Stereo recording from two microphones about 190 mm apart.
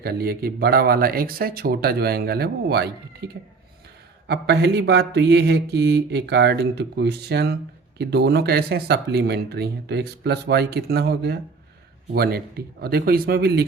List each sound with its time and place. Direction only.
0.0 s speech: 55° right (ahead or behind)
4.3 s speech: 60° right (ahead or behind)